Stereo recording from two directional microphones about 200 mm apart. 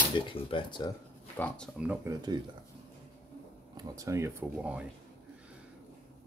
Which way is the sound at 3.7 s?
15° right (ahead or behind).